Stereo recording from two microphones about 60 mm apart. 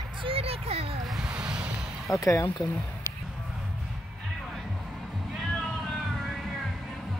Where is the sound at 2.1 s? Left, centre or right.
Left.